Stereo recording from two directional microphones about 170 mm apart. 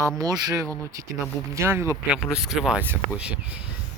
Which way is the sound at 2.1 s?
5° right (ahead or behind).